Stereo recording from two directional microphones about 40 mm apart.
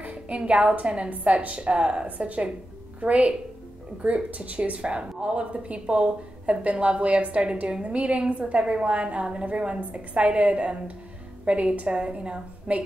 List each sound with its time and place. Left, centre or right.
0.0 s a woman's voice: right
1.1 s a woman's voice: right
7.6 s a woman's voice: right